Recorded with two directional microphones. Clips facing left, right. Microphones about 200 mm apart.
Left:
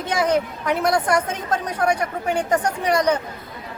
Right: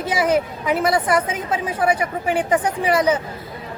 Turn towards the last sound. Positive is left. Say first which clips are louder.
# right 1 dB
turn(degrees=-5)  # may be behind; listen again after turning